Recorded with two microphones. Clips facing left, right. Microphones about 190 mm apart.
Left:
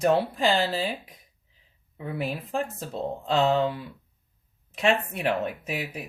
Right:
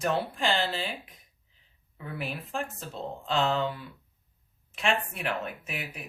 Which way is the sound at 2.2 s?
40° left (ahead or behind).